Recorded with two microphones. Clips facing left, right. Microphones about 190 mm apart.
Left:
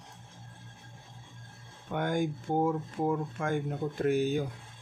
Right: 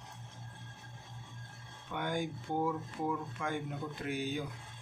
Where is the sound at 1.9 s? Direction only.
50° left (ahead or behind).